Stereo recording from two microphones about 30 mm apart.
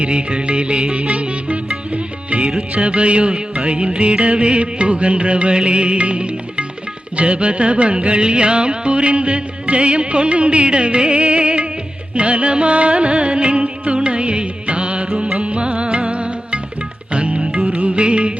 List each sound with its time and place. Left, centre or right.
0.0 s music: right